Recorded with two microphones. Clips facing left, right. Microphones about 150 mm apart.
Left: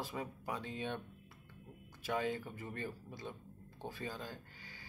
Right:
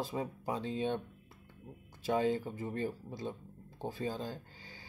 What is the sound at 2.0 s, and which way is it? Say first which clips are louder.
Speech: right 6 dB; 30° right (ahead or behind).